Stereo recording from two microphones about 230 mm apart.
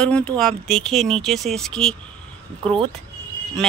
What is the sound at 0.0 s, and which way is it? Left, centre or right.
Speech, centre.